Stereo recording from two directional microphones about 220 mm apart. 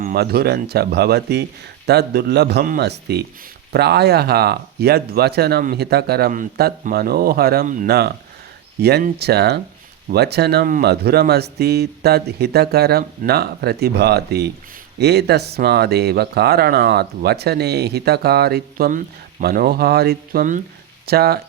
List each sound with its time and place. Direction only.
0.0 s speech: 45° right (ahead or behind)